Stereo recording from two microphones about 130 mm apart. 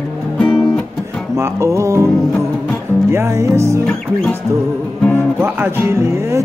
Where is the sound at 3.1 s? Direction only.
20° right (ahead or behind).